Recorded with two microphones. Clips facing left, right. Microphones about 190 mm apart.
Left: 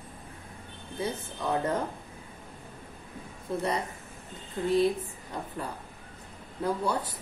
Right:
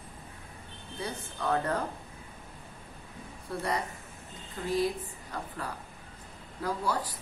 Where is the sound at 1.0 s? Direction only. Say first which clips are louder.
Left 2 dB; 20° left (ahead or behind).